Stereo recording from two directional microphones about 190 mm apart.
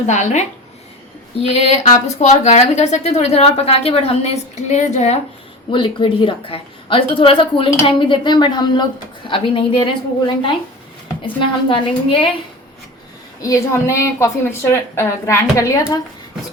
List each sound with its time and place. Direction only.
0.1 s a woman's voice: 40° left (ahead or behind)
13.4 s a woman's voice: 15° left (ahead or behind)